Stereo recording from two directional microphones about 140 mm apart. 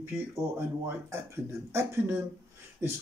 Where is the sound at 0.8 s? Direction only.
20° right (ahead or behind).